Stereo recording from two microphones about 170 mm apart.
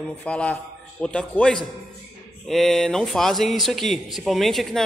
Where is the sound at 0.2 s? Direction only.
10° left (ahead or behind).